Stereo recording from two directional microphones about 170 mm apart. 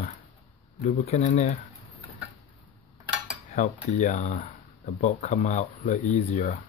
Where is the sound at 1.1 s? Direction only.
40° left (ahead or behind).